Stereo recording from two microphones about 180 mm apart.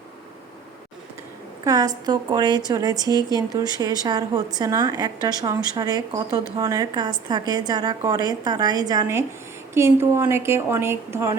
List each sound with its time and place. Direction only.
1.6 s a woman's voice: 20° right (ahead or behind)